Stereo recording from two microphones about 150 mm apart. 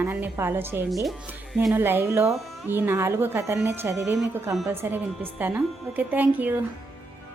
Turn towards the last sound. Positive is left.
turn(degrees=-10)  # may be behind; listen again after turning